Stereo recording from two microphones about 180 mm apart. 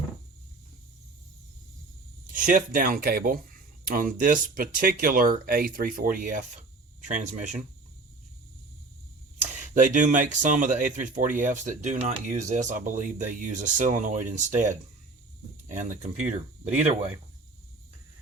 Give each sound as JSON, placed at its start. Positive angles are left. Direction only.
{"t": 2.3, "sound": "speech", "side_deg": -50}
{"t": 9.6, "sound": "speech", "side_deg": -45}